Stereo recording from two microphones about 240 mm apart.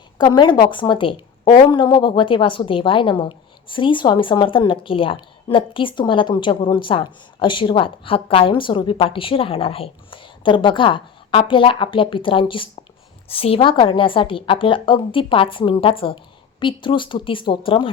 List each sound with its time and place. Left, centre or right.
0.2 s a woman's voice: centre